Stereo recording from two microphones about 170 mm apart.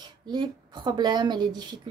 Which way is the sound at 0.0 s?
25° right (ahead or behind).